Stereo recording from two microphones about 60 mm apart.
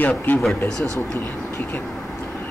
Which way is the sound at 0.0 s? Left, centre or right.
Left.